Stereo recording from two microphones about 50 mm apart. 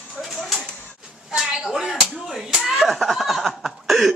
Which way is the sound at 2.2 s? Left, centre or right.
Centre.